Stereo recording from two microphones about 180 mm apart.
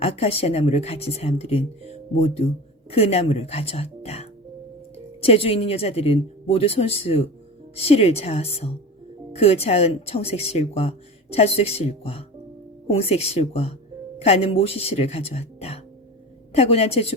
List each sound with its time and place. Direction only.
0.0 s speech: 35° left (ahead or behind)